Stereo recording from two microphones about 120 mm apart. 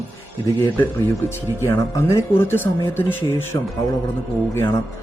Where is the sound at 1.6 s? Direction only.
20° left (ahead or behind).